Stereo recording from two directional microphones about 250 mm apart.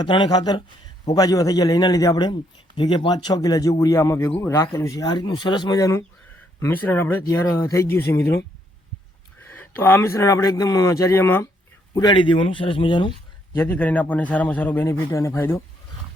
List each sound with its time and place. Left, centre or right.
0.0 s speech: centre
9.4 s speech: centre
13.6 s speech: centre